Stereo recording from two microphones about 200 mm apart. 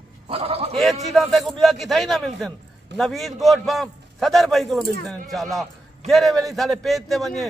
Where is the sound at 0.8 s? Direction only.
Centre (ahead or behind).